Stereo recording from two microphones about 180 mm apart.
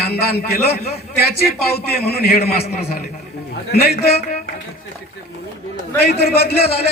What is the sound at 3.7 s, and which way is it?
Speech, 60° left (ahead or behind).